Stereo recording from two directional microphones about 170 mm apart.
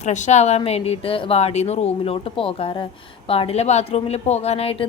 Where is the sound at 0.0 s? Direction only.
45° left (ahead or behind).